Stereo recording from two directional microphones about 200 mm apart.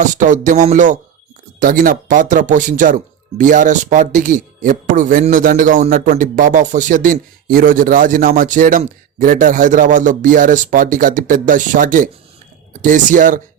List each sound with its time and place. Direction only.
0.0 s speech: 40° right (ahead or behind)